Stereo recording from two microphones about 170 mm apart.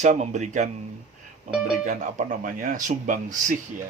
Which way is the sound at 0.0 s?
40° right (ahead or behind).